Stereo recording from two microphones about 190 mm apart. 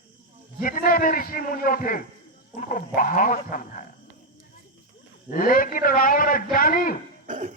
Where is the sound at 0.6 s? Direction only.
50° left (ahead or behind).